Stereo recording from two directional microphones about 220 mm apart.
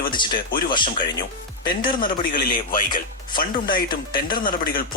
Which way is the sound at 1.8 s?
40° left (ahead or behind).